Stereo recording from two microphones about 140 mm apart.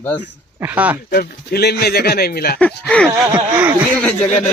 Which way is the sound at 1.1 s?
90° left.